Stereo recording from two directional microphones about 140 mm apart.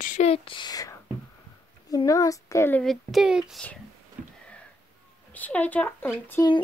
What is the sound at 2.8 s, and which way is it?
Speech, centre (ahead or behind).